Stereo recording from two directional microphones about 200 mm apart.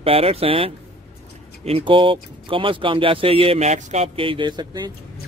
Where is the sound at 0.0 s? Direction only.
30° right (ahead or behind).